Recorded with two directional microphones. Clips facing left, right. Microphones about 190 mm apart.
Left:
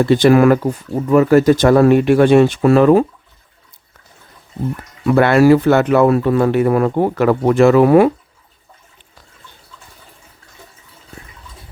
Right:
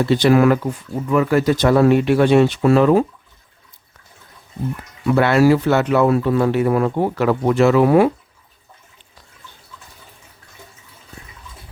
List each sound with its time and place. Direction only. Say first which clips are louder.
0.0 s speech: left 3 dB; 50° left (ahead or behind)
5.0 s speech: left 3 dB; 55° left (ahead or behind)